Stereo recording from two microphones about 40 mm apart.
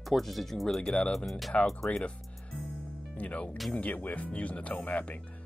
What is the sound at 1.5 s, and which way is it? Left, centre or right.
Speech, left.